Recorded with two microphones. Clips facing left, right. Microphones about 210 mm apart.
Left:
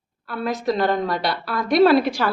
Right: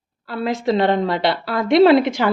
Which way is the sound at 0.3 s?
25° right (ahead or behind).